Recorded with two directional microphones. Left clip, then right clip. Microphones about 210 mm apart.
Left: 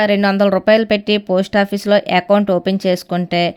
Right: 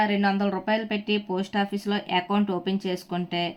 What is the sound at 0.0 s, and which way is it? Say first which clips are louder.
Speech: left 10 dB; 50° left (ahead or behind).